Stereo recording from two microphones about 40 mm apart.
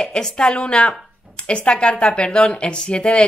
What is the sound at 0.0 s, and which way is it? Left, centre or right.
A woman's voice, centre.